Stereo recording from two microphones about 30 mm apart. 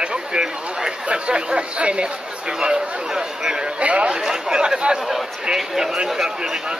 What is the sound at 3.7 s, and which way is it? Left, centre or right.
Speech, right.